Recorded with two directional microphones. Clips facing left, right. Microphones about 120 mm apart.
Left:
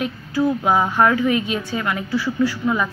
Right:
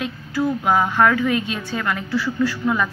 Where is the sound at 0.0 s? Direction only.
20° left (ahead or behind).